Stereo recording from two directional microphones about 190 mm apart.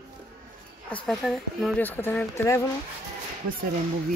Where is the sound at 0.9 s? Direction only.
5° left (ahead or behind).